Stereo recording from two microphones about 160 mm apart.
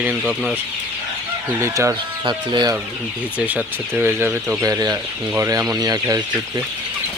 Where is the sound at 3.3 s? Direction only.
10° right (ahead or behind).